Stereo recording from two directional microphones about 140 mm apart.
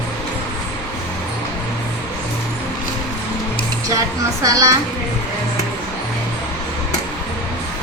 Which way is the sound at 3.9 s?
25° right (ahead or behind).